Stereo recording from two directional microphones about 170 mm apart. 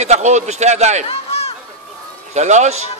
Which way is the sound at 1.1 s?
35° left (ahead or behind).